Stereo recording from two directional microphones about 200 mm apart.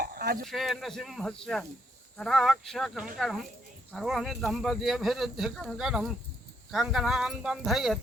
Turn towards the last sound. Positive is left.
turn(degrees=0)  # may be behind; listen again after turning